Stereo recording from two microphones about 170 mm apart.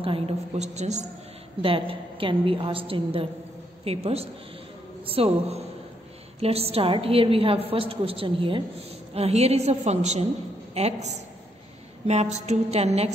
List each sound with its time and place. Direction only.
0.0 s a woman's voice: 35° right (ahead or behind)